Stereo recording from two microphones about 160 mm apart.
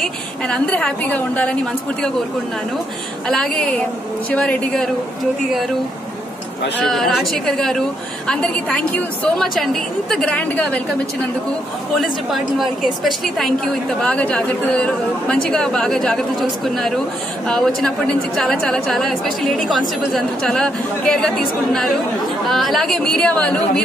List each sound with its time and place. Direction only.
0.0 s a woman's voice: 5° left (ahead or behind)
3.3 s a woman's voice: 5° left (ahead or behind)
6.8 s a woman's voice: centre (ahead or behind)
12.0 s a woman's voice: centre (ahead or behind)
22.5 s a woman's voice: centre (ahead or behind)